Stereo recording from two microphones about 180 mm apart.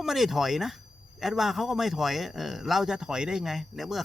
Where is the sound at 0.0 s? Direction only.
Centre (ahead or behind).